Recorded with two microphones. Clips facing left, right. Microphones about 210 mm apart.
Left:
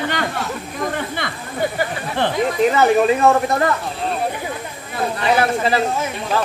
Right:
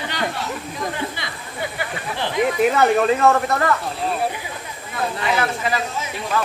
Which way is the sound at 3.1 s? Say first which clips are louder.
Left 2 dB; 15° left (ahead or behind).